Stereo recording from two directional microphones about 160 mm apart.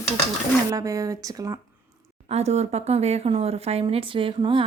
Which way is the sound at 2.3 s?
40° right (ahead or behind).